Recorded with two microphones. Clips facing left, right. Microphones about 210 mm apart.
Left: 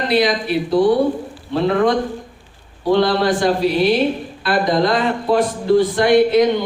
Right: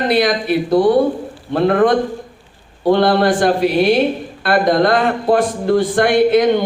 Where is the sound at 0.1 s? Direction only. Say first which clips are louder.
Even; 50° right (ahead or behind).